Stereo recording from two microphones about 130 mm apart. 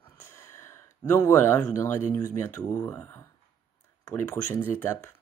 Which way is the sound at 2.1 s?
20° left (ahead or behind).